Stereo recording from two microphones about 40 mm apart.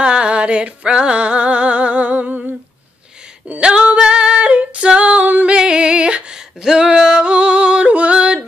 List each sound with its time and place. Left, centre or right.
0.0 s music: right
3.5 s female singing: right
5.5 s music: right
6.6 s yodeling: centre